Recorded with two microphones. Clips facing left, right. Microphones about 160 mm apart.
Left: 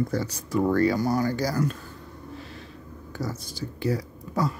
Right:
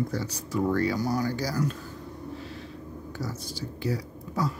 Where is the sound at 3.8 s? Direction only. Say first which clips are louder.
Left 4 dB; 55° left (ahead or behind).